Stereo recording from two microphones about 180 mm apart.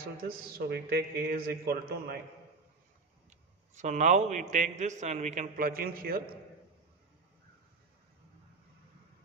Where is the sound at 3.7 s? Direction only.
40° right (ahead or behind).